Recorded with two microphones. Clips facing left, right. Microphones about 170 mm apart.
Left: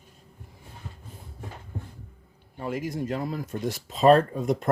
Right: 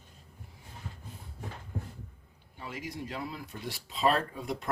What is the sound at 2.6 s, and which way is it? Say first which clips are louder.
Speech: left 10 dB; 50° left (ahead or behind).